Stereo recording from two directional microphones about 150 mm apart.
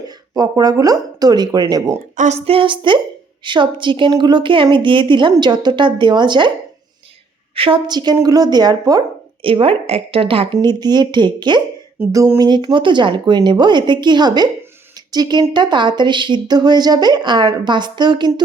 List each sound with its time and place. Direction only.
0.3 s a woman's voice: 25° right (ahead or behind)
2.1 s a woman's voice: 50° right (ahead or behind); by 6.5 s 30° right (ahead or behind)
7.5 s a woman's voice: 35° right (ahead or behind)
9.4 s a woman's voice: 35° right (ahead or behind)
11.9 s a woman's voice: 20° right (ahead or behind)